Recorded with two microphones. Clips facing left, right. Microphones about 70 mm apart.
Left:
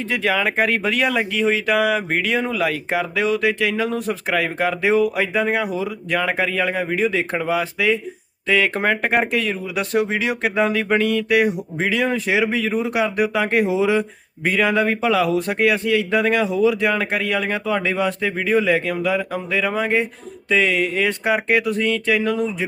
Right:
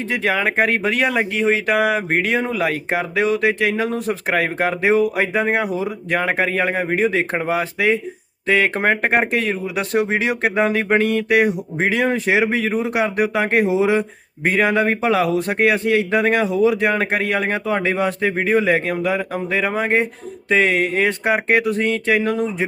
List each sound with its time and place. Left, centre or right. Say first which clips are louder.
0.1 s speech: right 1 dB; right